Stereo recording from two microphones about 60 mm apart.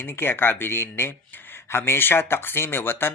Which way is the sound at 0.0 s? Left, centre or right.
Left.